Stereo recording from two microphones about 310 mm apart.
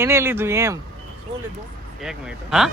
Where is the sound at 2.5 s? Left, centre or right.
Centre.